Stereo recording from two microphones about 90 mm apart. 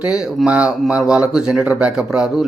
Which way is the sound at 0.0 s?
10° right (ahead or behind).